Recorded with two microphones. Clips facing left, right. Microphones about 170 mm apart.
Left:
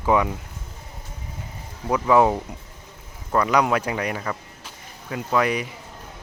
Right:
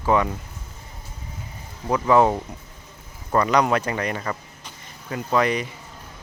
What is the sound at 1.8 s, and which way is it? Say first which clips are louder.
Speech: even; 5° left (ahead or behind).